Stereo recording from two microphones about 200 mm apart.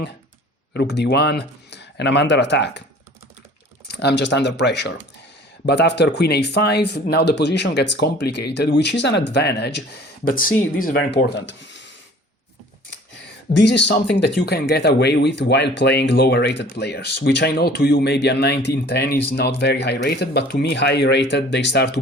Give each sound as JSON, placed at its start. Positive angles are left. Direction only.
{"t": 0.7, "sound": "speech", "side_deg": 55}
{"t": 3.8, "sound": "speech", "side_deg": 55}
{"t": 10.9, "sound": "speech", "side_deg": 60}
{"t": 13.5, "sound": "speech", "side_deg": 60}